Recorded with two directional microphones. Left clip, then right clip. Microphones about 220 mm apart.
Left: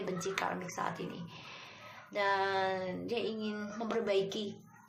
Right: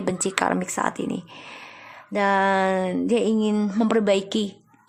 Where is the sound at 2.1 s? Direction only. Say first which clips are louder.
Right 12 dB; 45° right (ahead or behind).